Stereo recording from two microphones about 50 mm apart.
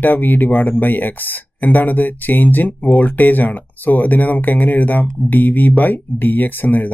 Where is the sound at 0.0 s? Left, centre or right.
Left.